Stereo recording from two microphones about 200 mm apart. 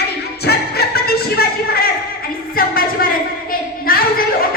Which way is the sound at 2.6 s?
45° left (ahead or behind).